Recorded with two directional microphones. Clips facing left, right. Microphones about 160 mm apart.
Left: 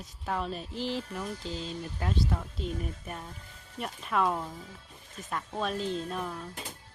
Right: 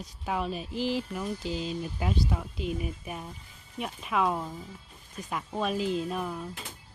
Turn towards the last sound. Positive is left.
turn(degrees=-5)  # may be behind; listen again after turning